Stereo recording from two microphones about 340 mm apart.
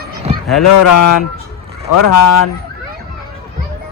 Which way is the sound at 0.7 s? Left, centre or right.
Left.